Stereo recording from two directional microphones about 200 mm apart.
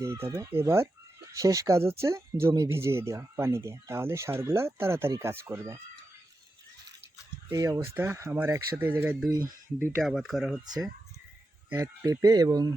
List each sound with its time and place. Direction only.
0.0 s speech: 15° right (ahead or behind)
7.5 s speech: 15° right (ahead or behind); by 10.6 s centre (ahead or behind)
11.7 s speech: 15° right (ahead or behind)